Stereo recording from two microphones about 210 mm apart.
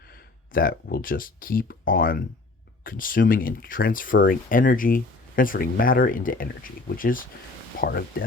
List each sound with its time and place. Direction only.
0.5 s speech: 45° left (ahead or behind)